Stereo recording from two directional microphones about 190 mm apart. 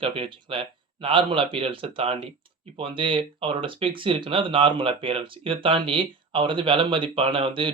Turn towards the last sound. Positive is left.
turn(degrees=-25)  # may be behind; listen again after turning